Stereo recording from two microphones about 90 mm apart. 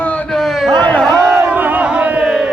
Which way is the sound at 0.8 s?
15° left (ahead or behind).